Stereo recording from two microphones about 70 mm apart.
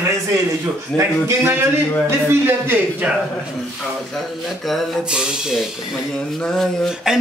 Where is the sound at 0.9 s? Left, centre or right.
Right.